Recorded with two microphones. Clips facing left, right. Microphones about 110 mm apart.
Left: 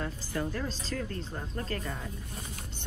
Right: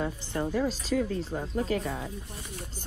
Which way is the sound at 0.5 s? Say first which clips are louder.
Right 7 dB; 10° right (ahead or behind).